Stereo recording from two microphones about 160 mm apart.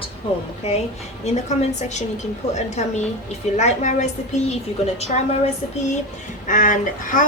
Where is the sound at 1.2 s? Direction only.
45° left (ahead or behind).